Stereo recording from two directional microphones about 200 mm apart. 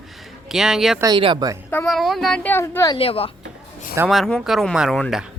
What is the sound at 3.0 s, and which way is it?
Speech, 30° left (ahead or behind).